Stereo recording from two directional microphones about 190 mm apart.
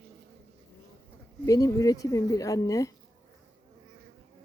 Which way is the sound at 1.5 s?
20° left (ahead or behind).